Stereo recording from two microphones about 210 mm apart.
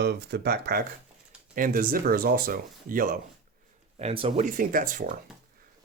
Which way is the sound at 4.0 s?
30° right (ahead or behind).